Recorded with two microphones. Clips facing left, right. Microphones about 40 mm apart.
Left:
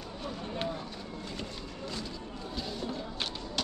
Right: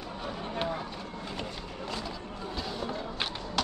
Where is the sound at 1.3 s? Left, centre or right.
Right.